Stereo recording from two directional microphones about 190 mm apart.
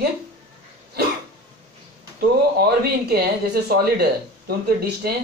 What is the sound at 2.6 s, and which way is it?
Speech, 55° right (ahead or behind).